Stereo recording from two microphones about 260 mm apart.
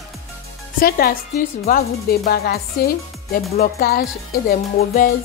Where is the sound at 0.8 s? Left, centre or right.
Left.